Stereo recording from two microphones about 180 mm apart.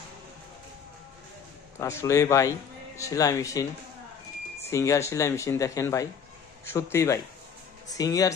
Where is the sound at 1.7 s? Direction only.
15° left (ahead or behind).